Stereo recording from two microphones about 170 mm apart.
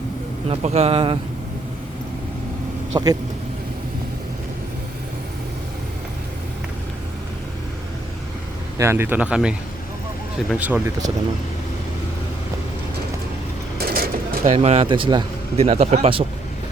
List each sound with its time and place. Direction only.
0.4 s a man's voice: 40° right (ahead or behind)
2.9 s speech: 20° right (ahead or behind)
8.8 s speech: 15° right (ahead or behind)
13.7 s vehicle: 60° right (ahead or behind)
14.4 s a man's voice: 40° right (ahead or behind)